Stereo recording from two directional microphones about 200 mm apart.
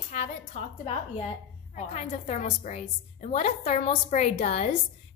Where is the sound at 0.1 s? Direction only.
35° left (ahead or behind).